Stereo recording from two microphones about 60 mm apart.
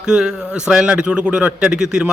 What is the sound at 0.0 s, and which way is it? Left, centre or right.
A man's voice, centre.